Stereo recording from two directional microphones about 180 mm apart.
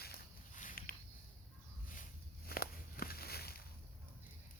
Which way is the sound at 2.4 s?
55° left (ahead or behind).